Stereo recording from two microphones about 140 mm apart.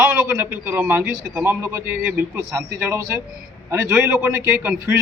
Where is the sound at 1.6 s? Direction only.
20° right (ahead or behind).